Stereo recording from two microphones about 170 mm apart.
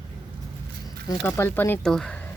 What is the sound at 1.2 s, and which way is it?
Speech, 15° left (ahead or behind).